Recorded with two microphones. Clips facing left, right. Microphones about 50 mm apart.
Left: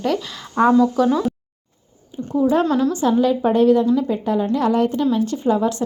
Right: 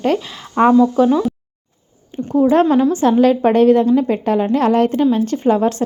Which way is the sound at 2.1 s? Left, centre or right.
Right.